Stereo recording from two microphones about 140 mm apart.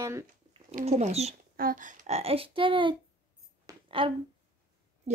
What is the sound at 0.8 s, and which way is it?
Speech, 55° right (ahead or behind).